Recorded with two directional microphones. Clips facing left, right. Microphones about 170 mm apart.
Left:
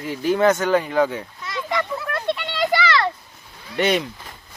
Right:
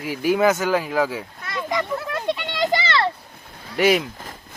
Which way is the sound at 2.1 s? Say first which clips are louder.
Even; 15° right (ahead or behind).